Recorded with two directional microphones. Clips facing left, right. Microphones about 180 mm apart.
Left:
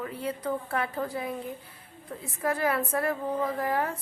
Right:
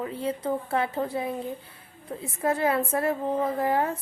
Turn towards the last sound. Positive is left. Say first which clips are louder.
# right 3 dB
turn(degrees=-25)  # may be behind; listen again after turning